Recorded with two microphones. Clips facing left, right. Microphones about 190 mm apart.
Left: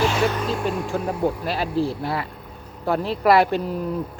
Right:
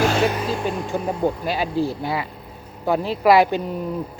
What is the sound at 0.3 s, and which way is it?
Vehicle, 5° right (ahead or behind).